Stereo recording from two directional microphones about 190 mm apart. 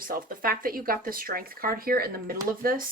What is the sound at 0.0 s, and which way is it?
A woman's voice, 50° right (ahead or behind).